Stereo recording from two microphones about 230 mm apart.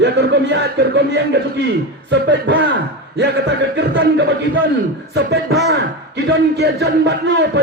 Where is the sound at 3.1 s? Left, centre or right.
Right.